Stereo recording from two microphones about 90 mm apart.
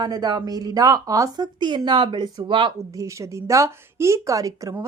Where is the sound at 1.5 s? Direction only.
55° right (ahead or behind).